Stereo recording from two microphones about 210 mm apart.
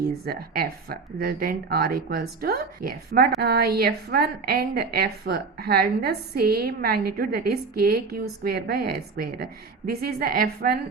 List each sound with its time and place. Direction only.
0.3 s a woman's voice: 45° right (ahead or behind)